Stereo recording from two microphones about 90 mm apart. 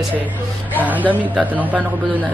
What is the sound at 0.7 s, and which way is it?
Speech, 20° right (ahead or behind).